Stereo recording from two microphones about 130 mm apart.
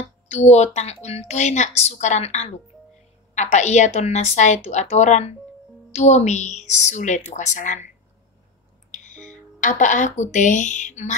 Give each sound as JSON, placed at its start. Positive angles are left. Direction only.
{"t": 0.3, "sound": "speech", "side_deg": 60}
{"t": 8.9, "sound": "speech", "side_deg": 75}